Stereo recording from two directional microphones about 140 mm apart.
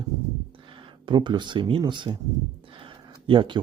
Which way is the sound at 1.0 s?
30° right (ahead or behind).